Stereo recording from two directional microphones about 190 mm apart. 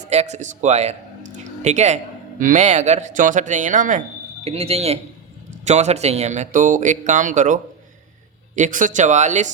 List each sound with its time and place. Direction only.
0.1 s speech: 35° right (ahead or behind)